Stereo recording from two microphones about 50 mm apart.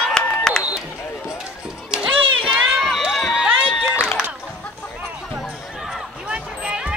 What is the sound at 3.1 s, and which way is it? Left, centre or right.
Run, centre.